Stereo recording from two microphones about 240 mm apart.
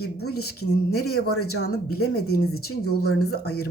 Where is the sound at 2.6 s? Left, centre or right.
Left.